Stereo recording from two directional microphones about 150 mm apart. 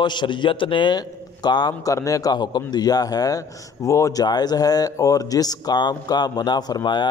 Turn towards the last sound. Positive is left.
turn(degrees=30)  # may be behind; listen again after turning